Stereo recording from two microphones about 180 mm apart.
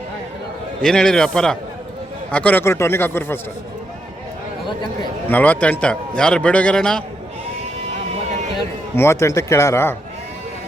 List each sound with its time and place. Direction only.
0.8 s a man's voice: 5° left (ahead or behind)
5.3 s a man's voice: 10° left (ahead or behind)
9.0 s a man's voice: 15° left (ahead or behind)